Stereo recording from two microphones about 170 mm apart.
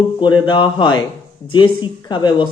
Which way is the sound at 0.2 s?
25° left (ahead or behind).